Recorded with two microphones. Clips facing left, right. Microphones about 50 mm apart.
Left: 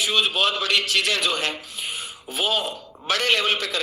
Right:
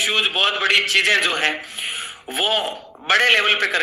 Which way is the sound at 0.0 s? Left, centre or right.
Right.